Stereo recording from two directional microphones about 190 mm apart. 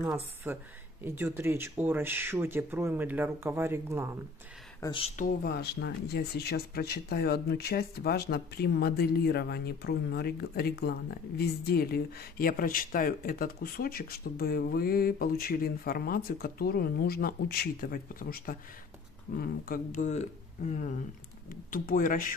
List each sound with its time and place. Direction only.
0.0 s speech: 10° right (ahead or behind)
4.8 s speech: 30° left (ahead or behind)
5.1 s speech: 55° left (ahead or behind)